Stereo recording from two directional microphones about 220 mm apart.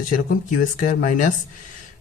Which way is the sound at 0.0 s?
40° left (ahead or behind).